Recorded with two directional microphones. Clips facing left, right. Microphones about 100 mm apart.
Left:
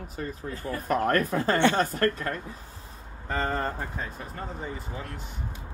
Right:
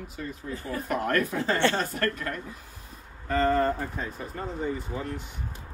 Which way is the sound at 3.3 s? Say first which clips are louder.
Right 5 dB; 20° left (ahead or behind).